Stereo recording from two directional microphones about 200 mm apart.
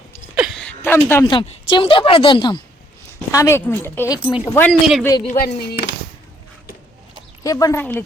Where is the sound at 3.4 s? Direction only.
10° left (ahead or behind).